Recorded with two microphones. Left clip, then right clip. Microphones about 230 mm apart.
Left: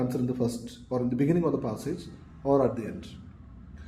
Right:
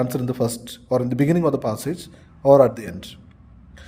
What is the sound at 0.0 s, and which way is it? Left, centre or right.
A man's voice, right.